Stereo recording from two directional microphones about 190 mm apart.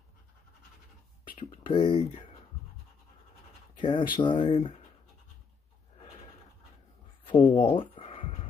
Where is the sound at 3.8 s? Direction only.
25° left (ahead or behind).